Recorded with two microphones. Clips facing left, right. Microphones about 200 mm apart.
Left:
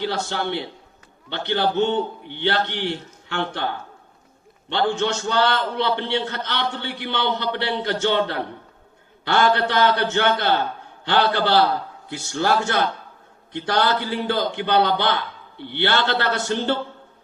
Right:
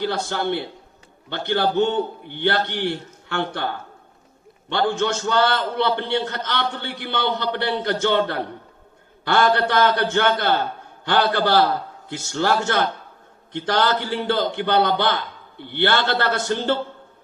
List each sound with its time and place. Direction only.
0.3 s a man's voice: 50° right (ahead or behind)
9.2 s a man's voice: 50° right (ahead or behind)